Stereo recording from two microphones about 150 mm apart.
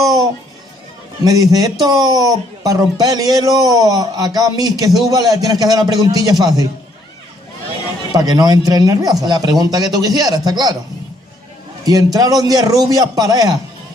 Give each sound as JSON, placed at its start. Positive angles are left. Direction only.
{"t": 0.0, "sound": "music", "side_deg": -25}
{"t": 1.2, "sound": "speech", "side_deg": -25}
{"t": 8.1, "sound": "speech", "side_deg": -25}
{"t": 11.8, "sound": "speech", "side_deg": -25}